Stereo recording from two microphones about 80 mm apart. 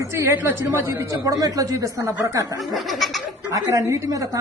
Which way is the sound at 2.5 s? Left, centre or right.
Centre.